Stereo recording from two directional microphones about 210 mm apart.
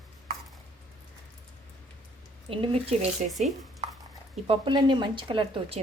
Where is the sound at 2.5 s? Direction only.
25° right (ahead or behind).